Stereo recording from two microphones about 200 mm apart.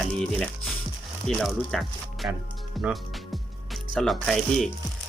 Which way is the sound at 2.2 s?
10° right (ahead or behind).